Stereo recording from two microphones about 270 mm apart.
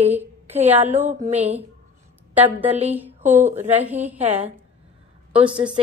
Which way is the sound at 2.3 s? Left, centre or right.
Centre.